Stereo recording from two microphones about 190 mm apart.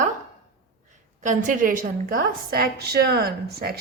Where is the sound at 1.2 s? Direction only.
40° right (ahead or behind).